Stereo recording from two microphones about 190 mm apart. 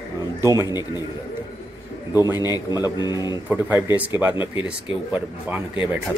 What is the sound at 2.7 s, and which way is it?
Speech, 20° left (ahead or behind).